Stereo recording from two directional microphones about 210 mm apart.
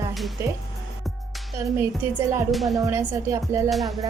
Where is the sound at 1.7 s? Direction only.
10° right (ahead or behind).